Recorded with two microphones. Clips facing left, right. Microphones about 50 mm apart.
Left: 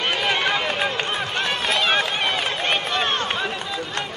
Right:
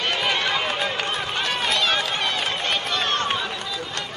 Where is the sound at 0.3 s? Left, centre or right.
Centre.